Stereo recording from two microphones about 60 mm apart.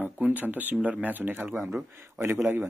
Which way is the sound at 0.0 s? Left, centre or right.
Right.